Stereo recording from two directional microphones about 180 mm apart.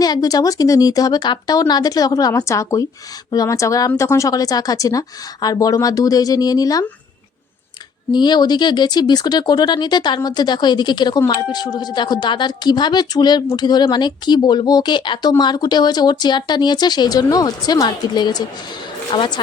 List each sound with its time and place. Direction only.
0.0 s speech: 20° left (ahead or behind)
8.1 s speech: 25° left (ahead or behind)